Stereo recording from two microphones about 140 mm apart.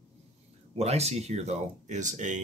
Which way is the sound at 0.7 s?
50° right (ahead or behind).